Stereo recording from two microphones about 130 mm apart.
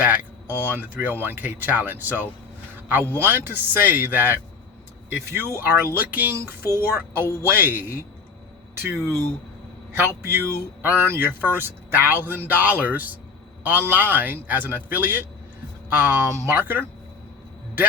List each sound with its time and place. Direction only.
0.0 s speech: 15° right (ahead or behind)